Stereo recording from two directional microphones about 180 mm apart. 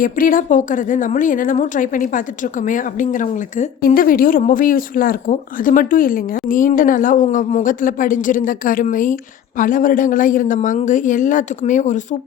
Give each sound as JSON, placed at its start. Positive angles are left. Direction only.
{"t": 0.0, "sound": "speech", "side_deg": 50}